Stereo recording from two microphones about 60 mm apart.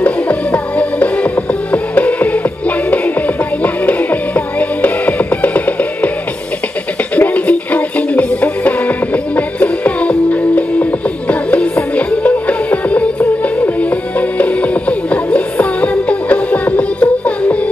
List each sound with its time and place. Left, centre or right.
0.0 s music: left
7.2 s music: left